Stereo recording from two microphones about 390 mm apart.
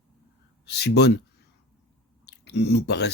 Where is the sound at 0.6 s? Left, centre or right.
Left.